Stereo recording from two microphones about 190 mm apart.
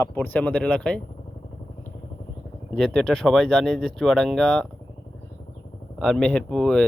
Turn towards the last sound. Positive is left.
turn(degrees=5)  # may be behind; listen again after turning